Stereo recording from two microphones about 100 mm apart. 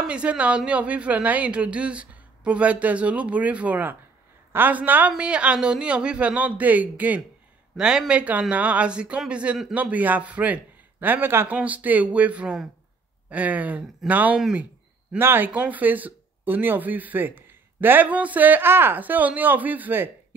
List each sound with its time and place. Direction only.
0.0 s speech: 10° right (ahead or behind)